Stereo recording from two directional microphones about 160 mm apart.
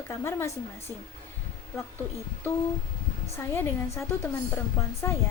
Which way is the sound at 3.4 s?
15° left (ahead or behind).